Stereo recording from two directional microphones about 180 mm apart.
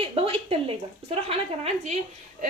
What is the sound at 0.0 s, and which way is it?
Speech, 30° right (ahead or behind).